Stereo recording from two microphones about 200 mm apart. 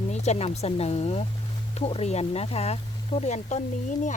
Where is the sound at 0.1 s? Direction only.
35° left (ahead or behind).